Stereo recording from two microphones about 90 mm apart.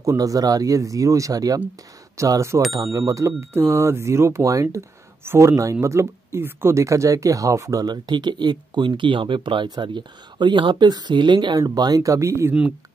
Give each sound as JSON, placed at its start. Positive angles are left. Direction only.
{"t": 0.0, "sound": "speech", "side_deg": -40}
{"t": 7.8, "sound": "speech", "side_deg": -55}